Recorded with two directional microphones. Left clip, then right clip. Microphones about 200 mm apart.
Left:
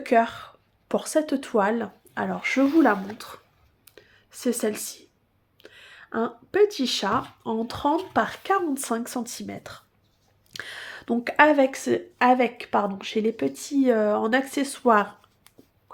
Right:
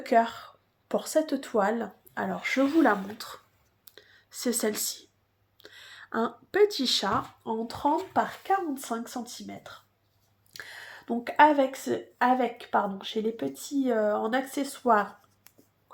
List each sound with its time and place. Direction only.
0.0 s speech: 40° left (ahead or behind)
3.8 s clicking: 20° left (ahead or behind)
5.6 s speech: 20° left (ahead or behind)
7.7 s speech: 45° left (ahead or behind)
10.5 s speech: 45° left (ahead or behind)